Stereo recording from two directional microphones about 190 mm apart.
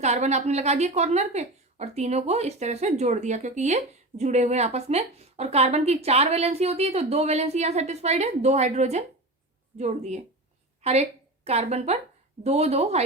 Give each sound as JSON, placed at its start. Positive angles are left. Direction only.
{"t": 0.0, "sound": "a woman's voice", "side_deg": -35}